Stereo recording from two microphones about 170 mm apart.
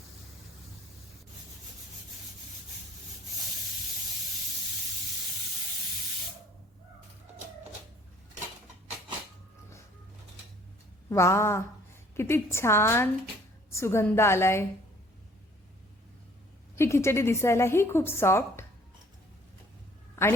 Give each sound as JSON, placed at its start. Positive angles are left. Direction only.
{"t": 11.1, "sound": "a woman's voice", "side_deg": 15}
{"t": 16.7, "sound": "a woman's voice", "side_deg": 15}